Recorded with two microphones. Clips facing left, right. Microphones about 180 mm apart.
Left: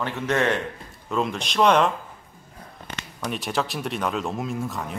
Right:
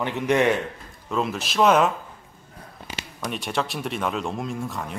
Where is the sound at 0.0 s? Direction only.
15° right (ahead or behind).